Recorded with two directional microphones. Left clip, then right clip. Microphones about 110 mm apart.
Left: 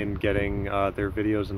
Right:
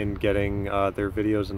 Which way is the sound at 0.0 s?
35° right (ahead or behind).